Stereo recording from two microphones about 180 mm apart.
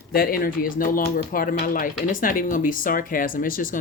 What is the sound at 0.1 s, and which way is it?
Speech, 55° left (ahead or behind).